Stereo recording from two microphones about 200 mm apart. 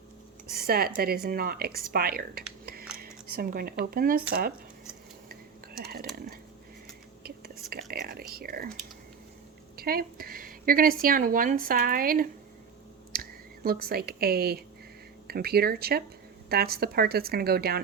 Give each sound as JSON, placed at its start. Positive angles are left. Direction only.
{"t": 0.5, "sound": "speech", "side_deg": -50}
{"t": 5.8, "sound": "speech", "side_deg": -50}
{"t": 7.2, "sound": "whispering", "side_deg": -50}
{"t": 8.3, "sound": "speech", "side_deg": -50}
{"t": 9.7, "sound": "speech", "side_deg": -50}
{"t": 13.7, "sound": "speech", "side_deg": -50}